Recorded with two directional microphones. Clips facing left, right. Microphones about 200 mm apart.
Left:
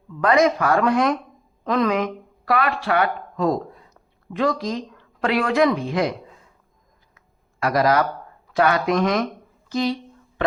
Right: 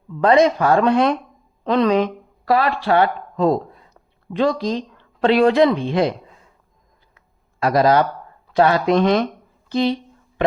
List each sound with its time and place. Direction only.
0.2 s speech: 30° right (ahead or behind)
7.6 s speech: 25° right (ahead or behind)
9.6 s a sound: 25° right (ahead or behind)